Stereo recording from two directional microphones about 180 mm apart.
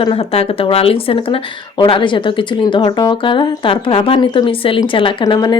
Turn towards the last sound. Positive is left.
turn(degrees=25)  # may be behind; listen again after turning